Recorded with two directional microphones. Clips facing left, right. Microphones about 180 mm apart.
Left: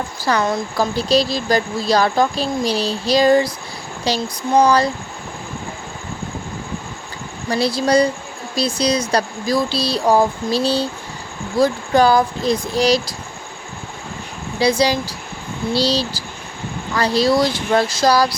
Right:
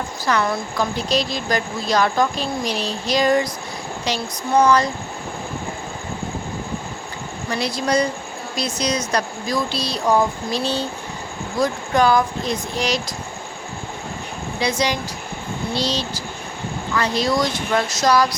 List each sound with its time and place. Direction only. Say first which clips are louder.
0.2 s speech: left 2 dB; 30° left (ahead or behind)
7.5 s speech: left 5 dB; 30° left (ahead or behind)
14.6 s speech: left 6 dB; 35° left (ahead or behind)